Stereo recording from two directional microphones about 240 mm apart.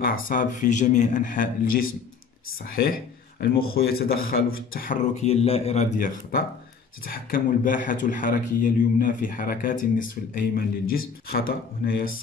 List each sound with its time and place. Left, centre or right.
0.0 s speech: left